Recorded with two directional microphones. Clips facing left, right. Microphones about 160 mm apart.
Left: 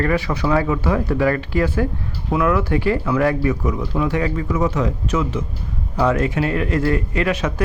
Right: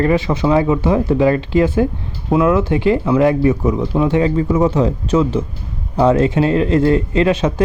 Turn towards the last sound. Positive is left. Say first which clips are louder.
# right 6 dB
turn(degrees=-25)  # may be behind; listen again after turning